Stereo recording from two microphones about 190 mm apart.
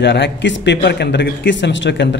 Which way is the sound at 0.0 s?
65° left (ahead or behind).